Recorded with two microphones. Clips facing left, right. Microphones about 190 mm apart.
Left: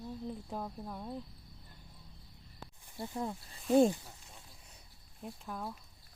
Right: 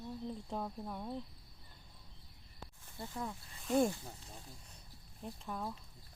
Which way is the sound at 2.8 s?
15° left (ahead or behind).